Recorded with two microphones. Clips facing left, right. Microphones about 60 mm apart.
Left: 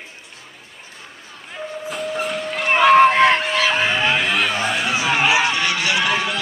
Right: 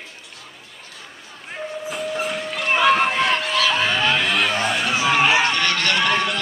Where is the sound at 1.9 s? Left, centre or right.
Centre.